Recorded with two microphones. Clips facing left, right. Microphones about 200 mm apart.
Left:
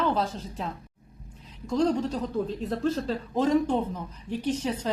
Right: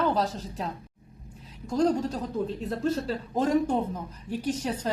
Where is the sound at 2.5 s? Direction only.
Centre (ahead or behind).